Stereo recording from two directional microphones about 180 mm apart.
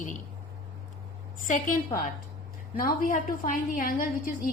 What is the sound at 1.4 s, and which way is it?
Speech, 45° left (ahead or behind).